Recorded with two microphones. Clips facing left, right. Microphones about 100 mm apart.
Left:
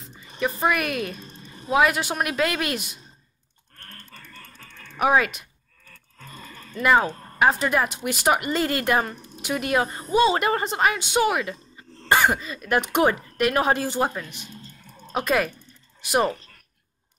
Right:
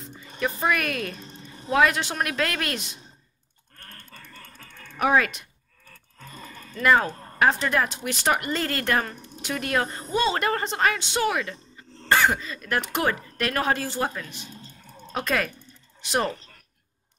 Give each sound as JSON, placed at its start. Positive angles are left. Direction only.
{"t": 0.0, "sound": "speech", "side_deg": 5}
{"t": 1.2, "sound": "a sound", "side_deg": -20}
{"t": 1.7, "sound": "speech", "side_deg": 10}
{"t": 4.9, "sound": "speech", "side_deg": 10}
{"t": 6.8, "sound": "speech", "side_deg": 10}